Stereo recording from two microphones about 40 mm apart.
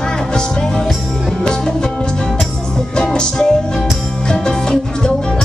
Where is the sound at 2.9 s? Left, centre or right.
Left.